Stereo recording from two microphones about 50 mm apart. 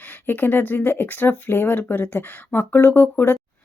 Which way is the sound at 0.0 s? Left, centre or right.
Left.